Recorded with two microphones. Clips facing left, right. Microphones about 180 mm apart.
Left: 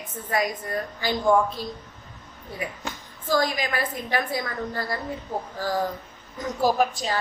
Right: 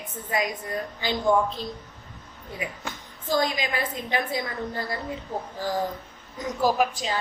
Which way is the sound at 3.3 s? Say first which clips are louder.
Left 1 dB; 25° right (ahead or behind).